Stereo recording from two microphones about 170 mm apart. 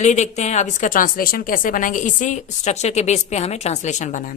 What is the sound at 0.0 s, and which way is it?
A woman's voice, 45° left (ahead or behind).